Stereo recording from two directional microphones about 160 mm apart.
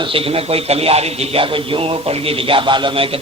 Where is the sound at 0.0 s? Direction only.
35° right (ahead or behind).